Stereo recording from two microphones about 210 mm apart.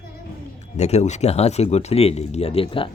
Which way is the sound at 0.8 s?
30° left (ahead or behind).